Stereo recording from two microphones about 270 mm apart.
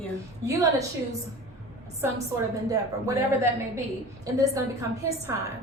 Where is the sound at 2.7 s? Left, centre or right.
Centre.